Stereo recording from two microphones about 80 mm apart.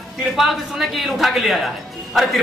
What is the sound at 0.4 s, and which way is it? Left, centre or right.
A man's voice, centre.